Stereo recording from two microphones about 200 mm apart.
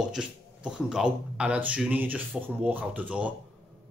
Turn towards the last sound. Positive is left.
turn(degrees=-5)  # may be behind; listen again after turning